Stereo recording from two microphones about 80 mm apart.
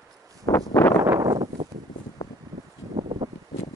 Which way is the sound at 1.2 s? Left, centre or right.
Right.